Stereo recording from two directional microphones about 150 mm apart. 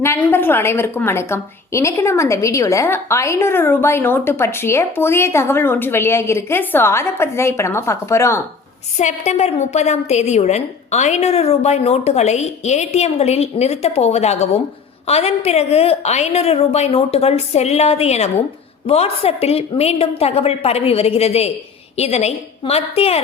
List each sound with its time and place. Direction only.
0.0 s a woman's voice: 15° left (ahead or behind)
9.0 s a woman's voice: 50° left (ahead or behind)